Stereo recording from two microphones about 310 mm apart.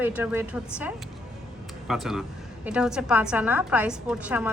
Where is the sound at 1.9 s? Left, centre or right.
Centre.